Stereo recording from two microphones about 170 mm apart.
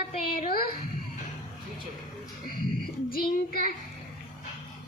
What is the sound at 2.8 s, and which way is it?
Speech, 60° left (ahead or behind).